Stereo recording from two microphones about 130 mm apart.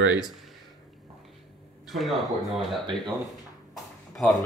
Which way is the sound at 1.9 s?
Centre (ahead or behind).